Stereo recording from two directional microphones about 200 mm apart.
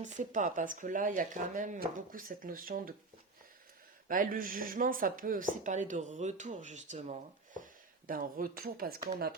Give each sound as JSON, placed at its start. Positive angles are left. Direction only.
{"t": 0.0, "sound": "speech", "side_deg": -40}
{"t": 4.1, "sound": "speech", "side_deg": -45}